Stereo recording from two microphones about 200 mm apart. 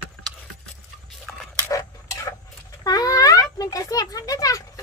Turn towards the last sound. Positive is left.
turn(degrees=15)  # may be behind; listen again after turning